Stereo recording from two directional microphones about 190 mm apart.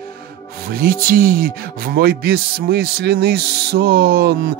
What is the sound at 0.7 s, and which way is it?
Speech, 50° right (ahead or behind).